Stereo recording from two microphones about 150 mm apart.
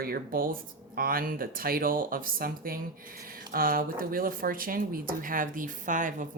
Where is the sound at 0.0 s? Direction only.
80° right.